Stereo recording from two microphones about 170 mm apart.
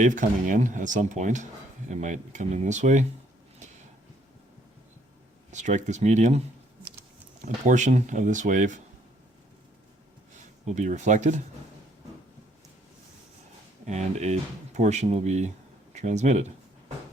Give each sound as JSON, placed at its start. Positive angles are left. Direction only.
{"t": 0.0, "sound": "speech", "side_deg": -50}
{"t": 5.5, "sound": "speech", "side_deg": -45}
{"t": 7.4, "sound": "speech", "side_deg": -45}
{"t": 10.7, "sound": "speech", "side_deg": -45}
{"t": 13.8, "sound": "speech", "side_deg": -40}